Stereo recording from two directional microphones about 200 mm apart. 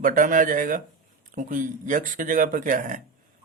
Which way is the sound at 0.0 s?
40° right (ahead or behind).